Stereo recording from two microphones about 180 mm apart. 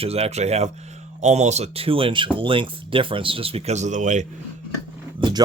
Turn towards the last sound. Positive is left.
turn(degrees=-30)  # may be behind; listen again after turning